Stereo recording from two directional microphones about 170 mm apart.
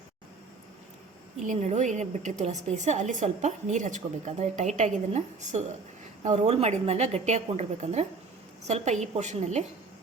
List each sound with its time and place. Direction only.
1.4 s a woman's voice: 45° right (ahead or behind)